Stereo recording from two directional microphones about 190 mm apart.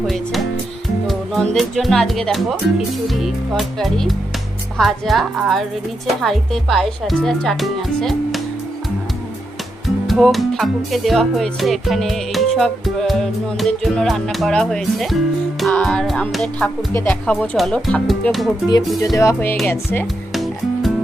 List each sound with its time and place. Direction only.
1.0 s music: centre (ahead or behind)
10.1 s music: centre (ahead or behind)
19.0 s music: 15° left (ahead or behind)
20.3 s music: centre (ahead or behind)